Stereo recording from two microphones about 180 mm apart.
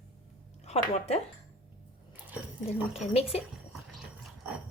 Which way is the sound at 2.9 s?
35° left (ahead or behind).